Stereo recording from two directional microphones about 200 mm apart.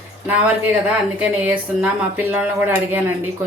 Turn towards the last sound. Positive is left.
turn(degrees=-10)  # may be behind; listen again after turning